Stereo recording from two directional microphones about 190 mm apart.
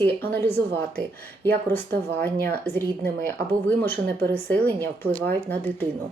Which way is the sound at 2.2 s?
60° right (ahead or behind).